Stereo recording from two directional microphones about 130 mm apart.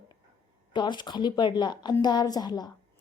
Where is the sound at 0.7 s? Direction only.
35° left (ahead or behind).